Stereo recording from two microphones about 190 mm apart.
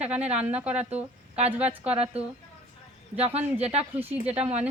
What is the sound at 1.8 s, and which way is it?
Speech, 30° right (ahead or behind).